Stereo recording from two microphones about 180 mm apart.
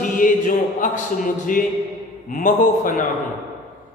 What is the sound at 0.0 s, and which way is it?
Speech, 50° left (ahead or behind).